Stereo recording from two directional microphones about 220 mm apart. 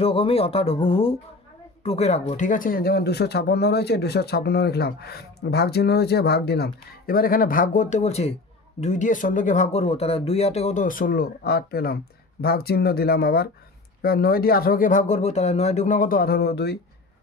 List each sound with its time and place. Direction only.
0.0 s speech: 25° left (ahead or behind); by 16.7 s 45° left (ahead or behind)